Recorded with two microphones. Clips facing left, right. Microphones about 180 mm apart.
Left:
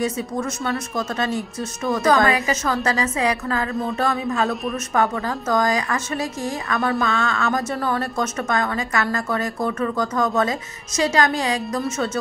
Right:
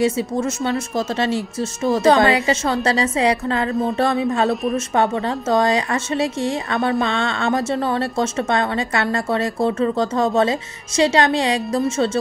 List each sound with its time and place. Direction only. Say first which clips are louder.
0.0 s a woman's voice: right 5 dB; 25° right (ahead or behind)
4.7 s a woman's voice: right 3 dB; 25° right (ahead or behind)